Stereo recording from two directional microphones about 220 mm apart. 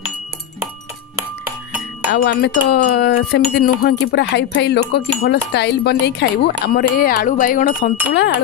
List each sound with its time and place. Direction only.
2.1 s chime: 45° left (ahead or behind)
8.1 s chime: 50° left (ahead or behind)